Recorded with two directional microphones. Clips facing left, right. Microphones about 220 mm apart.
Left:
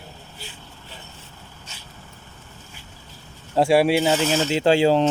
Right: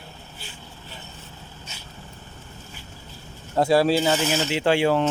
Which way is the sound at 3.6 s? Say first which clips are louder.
Left 2 dB; 10° left (ahead or behind).